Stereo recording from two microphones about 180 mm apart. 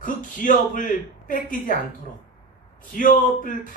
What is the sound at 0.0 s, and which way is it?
Speech, 50° left (ahead or behind).